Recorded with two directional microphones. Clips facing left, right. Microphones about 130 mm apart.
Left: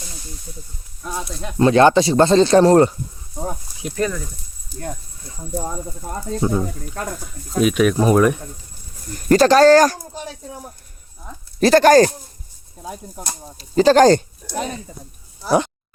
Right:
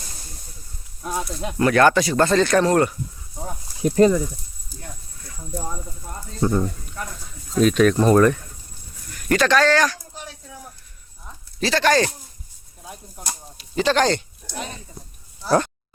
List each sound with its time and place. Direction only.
1.0 s speech: centre (ahead or behind)
1.5 s speech: 25° left (ahead or behind)
3.9 s speech: 25° right (ahead or behind)
5.2 s speech: 25° left (ahead or behind)
6.4 s speech: 10° left (ahead or behind)
6.7 s speech: 60° left (ahead or behind)
7.6 s speech: 10° left (ahead or behind)
9.0 s a sound: 35° left (ahead or behind)
11.6 s speech: 45° left (ahead or behind)
15.4 s a sound: 15° left (ahead or behind)